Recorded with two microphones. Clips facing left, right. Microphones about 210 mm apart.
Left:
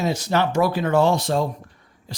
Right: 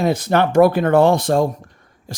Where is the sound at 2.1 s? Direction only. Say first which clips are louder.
Right 4 dB; 45° right (ahead or behind).